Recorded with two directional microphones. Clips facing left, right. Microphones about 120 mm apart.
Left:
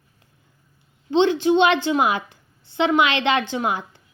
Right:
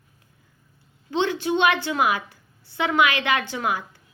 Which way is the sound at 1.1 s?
25° left (ahead or behind).